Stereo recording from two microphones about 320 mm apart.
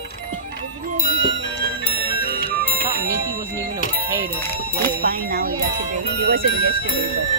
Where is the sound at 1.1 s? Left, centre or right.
Left.